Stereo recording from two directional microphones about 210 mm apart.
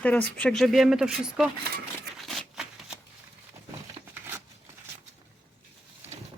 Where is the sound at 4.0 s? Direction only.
25° right (ahead or behind).